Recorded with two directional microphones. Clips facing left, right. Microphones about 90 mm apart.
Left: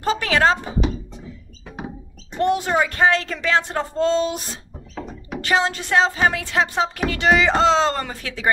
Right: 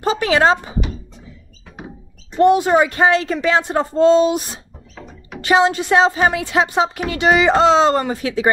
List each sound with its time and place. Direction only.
0.0 s speech: 20° right (ahead or behind)
2.4 s speech: 20° right (ahead or behind)